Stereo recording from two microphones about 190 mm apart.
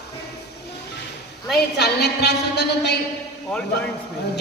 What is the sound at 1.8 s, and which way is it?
Speech, 60° left (ahead or behind).